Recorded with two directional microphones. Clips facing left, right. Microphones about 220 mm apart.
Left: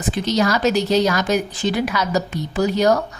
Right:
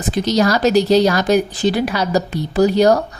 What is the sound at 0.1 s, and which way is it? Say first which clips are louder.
Speech: right 3 dB; 40° right (ahead or behind).